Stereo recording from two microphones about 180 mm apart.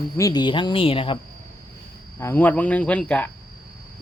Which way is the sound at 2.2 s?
10° left (ahead or behind).